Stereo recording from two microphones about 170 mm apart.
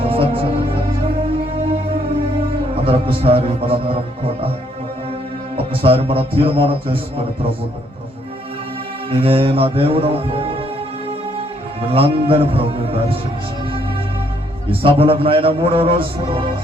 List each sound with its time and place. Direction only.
0.0 s music: 35° right (ahead or behind)
2.8 s a man's voice: 35° right (ahead or behind)
5.5 s a man's voice: 35° right (ahead or behind)
9.0 s a man's voice: 35° right (ahead or behind)
11.9 s a man's voice: 35° right (ahead or behind)
14.7 s a man's voice: 35° right (ahead or behind)